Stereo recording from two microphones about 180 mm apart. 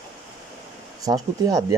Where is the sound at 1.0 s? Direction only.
20° right (ahead or behind).